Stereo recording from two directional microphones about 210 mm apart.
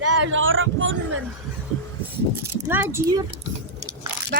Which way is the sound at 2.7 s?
10° right (ahead or behind).